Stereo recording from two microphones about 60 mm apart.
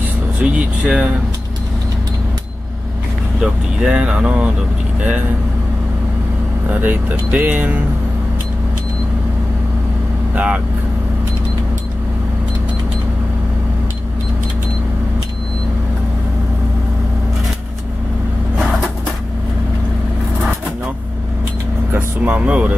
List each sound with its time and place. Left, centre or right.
0.4 s speech: right
3.3 s speech: centre
6.8 s speech: right
10.3 s speech: right
21.9 s speech: right